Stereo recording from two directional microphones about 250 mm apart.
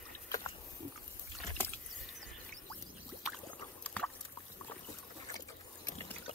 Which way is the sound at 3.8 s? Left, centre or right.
Centre.